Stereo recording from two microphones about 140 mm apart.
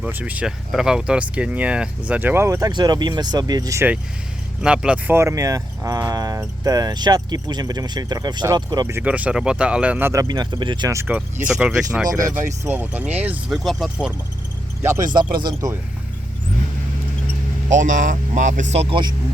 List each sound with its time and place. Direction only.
0.0 s speech: 10° right (ahead or behind)
4.6 s speech: 5° right (ahead or behind); by 9.0 s 30° right (ahead or behind)
9.0 s speech: 10° right (ahead or behind)
10.1 s speech: 25° right (ahead or behind)
10.9 s speech: 15° right (ahead or behind)
12.0 s speech: 25° right (ahead or behind)
12.6 s speech: 10° right (ahead or behind)
13.6 s speech: centre (ahead or behind)
14.8 s speech: 20° right (ahead or behind)
17.7 s speech: 65° right (ahead or behind)